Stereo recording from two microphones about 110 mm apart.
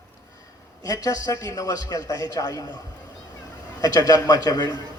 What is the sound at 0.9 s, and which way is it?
A man's voice, 35° left (ahead or behind).